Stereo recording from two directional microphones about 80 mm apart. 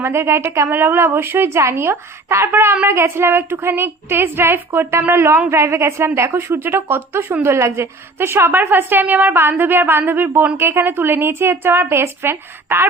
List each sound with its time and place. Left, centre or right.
0.0 s a woman's voice: right